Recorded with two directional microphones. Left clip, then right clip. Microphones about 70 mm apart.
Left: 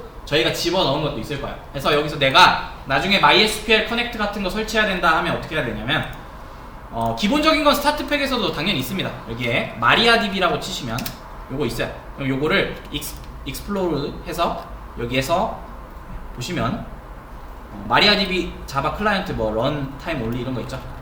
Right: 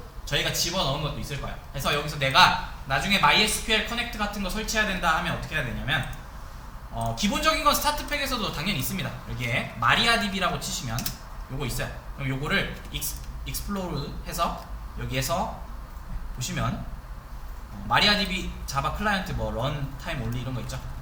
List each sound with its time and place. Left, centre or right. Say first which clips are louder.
0.3 s a man's voice: left 7 dB; right
12.4 s a man's voice: left 7 dB; right
17.8 s a man's voice: left 6 dB; right